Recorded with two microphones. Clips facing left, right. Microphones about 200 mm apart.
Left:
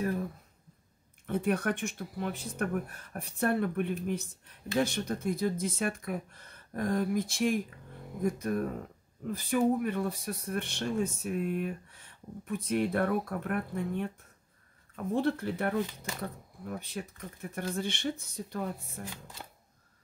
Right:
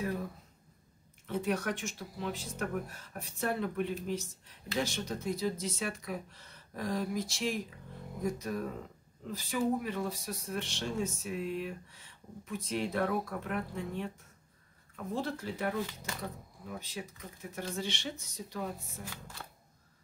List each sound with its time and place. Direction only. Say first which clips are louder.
1.2 s speech: left 3 dB; 55° left (ahead or behind)